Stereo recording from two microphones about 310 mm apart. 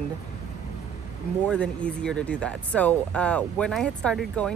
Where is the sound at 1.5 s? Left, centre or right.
Centre.